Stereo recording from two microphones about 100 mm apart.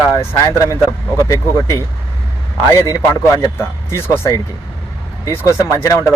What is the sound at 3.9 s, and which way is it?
Speech, 25° left (ahead or behind).